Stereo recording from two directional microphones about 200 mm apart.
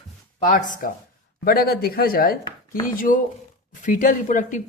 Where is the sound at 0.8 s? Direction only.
45° left (ahead or behind).